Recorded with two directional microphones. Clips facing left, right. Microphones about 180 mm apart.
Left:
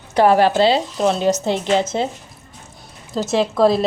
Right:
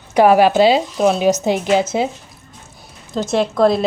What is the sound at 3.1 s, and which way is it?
Speech, 5° left (ahead or behind).